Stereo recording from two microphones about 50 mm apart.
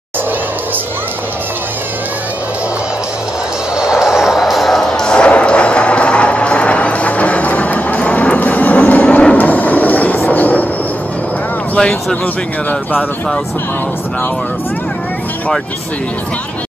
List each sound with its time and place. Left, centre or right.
3.8 s music: centre; by 10.7 s left
11.7 s speech: centre